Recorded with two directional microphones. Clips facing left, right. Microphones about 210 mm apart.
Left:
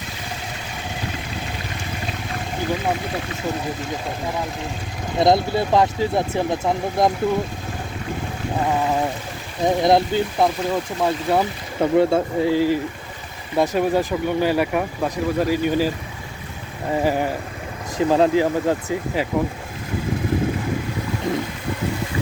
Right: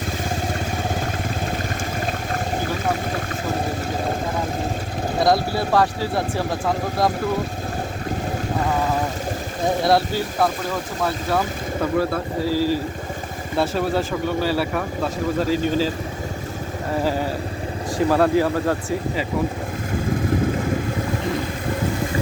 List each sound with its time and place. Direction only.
5.2 s speech: 20° left (ahead or behind)
9.8 s speech: 20° left (ahead or behind)
17.0 s speech: 15° left (ahead or behind)